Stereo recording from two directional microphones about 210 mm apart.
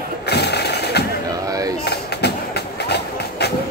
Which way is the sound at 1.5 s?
15° right (ahead or behind).